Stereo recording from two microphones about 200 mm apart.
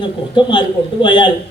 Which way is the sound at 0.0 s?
20° left (ahead or behind).